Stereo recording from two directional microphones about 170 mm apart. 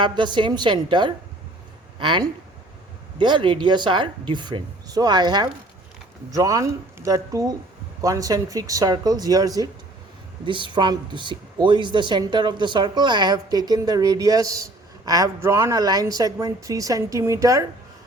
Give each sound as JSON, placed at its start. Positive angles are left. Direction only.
{"t": 0.0, "sound": "speech", "side_deg": -25}